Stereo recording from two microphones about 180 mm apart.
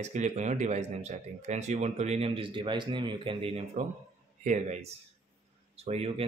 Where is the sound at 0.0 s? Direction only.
40° right (ahead or behind).